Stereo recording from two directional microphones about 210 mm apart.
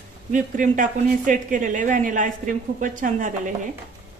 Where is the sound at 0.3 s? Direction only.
40° right (ahead or behind).